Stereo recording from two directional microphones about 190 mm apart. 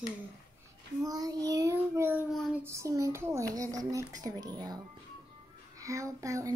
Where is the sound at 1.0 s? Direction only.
20° right (ahead or behind).